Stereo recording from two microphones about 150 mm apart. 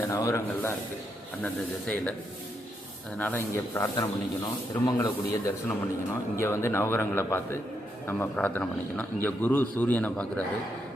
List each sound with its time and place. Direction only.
0.0 s a man's voice: 20° left (ahead or behind)
1.9 s a man's voice: 5° left (ahead or behind)
3.2 s a man's voice: 15° left (ahead or behind)